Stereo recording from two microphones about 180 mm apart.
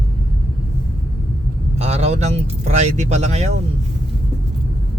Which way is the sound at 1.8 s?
35° right (ahead or behind).